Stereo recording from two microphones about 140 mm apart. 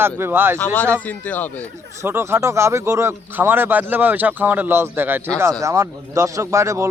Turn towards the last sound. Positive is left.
turn(degrees=-20)  # may be behind; listen again after turning